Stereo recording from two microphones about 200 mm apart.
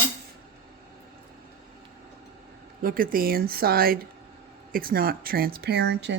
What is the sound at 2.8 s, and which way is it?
Speech, 45° right (ahead or behind).